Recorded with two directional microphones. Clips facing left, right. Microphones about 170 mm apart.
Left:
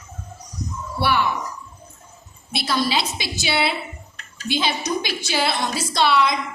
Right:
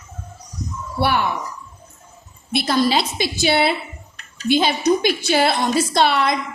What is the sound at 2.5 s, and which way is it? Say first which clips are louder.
A woman's voice: right 5 dB; 50° right (ahead or behind).